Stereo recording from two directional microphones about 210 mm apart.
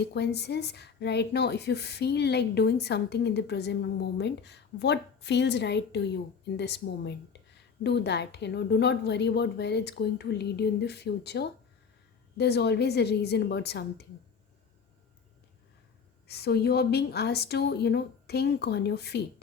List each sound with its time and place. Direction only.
0.0 s speech: 55° left (ahead or behind)
16.2 s speech: 50° left (ahead or behind)